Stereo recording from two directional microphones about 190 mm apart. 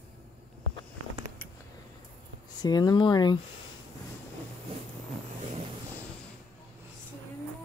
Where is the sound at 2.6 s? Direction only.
20° left (ahead or behind).